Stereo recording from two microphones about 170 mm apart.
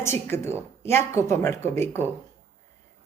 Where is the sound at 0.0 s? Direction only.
15° left (ahead or behind).